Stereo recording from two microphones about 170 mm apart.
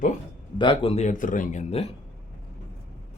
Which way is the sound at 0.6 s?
30° left (ahead or behind).